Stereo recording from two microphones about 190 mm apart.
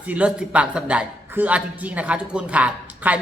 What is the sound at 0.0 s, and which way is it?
A woman's voice, 5° right (ahead or behind).